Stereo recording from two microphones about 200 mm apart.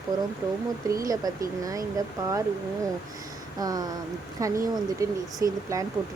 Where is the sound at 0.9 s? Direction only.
15° right (ahead or behind).